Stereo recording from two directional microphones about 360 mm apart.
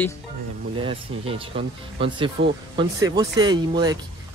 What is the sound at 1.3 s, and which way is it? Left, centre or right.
Speech, centre.